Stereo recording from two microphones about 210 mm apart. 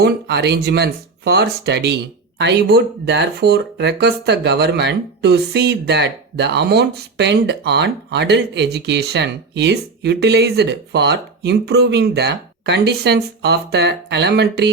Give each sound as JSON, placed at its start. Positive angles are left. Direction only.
{"t": 0.0, "sound": "speech", "side_deg": -50}